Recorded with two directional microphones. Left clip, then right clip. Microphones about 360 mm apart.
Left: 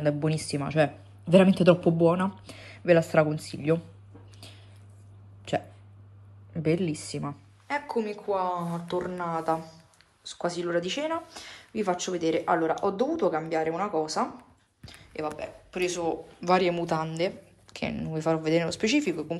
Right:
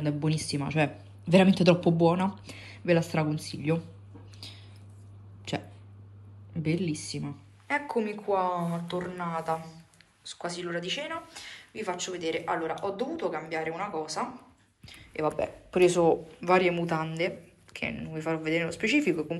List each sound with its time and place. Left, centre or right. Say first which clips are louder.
0.0 s speech: left 4 dB; centre
1.2 s speech: left 2 dB; centre
2.4 s speech: left 4 dB; centre
6.5 s speech: left 5 dB; centre
7.6 s speech: even; centre
15.2 s speech: right 6 dB; centre